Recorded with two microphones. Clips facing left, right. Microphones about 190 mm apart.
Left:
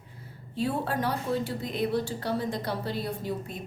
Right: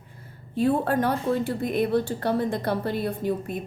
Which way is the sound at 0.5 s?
50° right (ahead or behind).